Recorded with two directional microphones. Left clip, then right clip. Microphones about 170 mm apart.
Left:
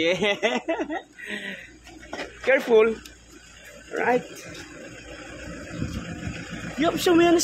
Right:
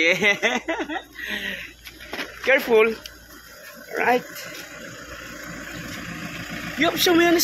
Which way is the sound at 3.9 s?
10° right (ahead or behind).